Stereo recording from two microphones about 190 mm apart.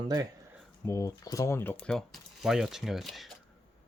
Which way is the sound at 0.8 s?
15° left (ahead or behind).